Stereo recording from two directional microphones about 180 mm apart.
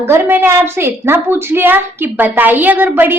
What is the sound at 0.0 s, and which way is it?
A woman's voice, 10° right (ahead or behind).